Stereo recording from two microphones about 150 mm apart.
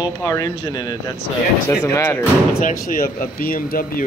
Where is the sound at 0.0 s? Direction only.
25° left (ahead or behind).